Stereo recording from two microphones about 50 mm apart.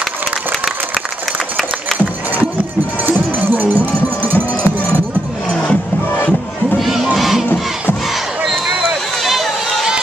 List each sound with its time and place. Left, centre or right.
3.1 s run: right
5.5 s music: left
6.8 s crowd: centre
9.2 s run: centre